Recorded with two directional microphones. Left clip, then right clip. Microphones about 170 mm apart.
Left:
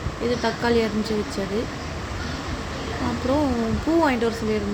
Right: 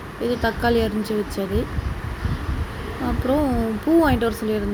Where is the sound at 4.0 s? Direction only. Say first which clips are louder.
Even; 15° right (ahead or behind).